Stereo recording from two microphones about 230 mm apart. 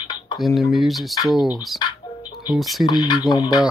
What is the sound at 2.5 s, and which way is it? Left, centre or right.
Speech, centre.